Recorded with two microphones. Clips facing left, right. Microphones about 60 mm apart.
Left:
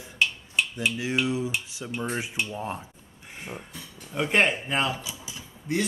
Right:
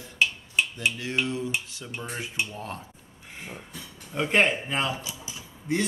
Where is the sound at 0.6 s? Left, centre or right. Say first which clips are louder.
Right 1 dB; centre.